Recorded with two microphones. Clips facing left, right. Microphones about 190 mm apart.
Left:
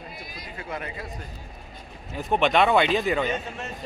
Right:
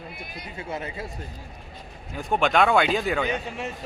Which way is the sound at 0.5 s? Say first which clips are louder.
Right 2 dB; 25° right (ahead or behind).